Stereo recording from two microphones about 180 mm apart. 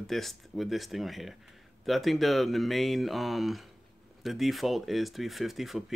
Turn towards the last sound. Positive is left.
turn(degrees=0)  # may be behind; listen again after turning